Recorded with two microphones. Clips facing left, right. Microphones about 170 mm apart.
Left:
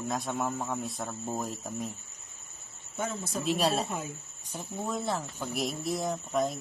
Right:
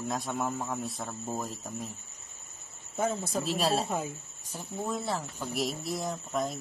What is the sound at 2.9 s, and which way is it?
Speech, 30° right (ahead or behind).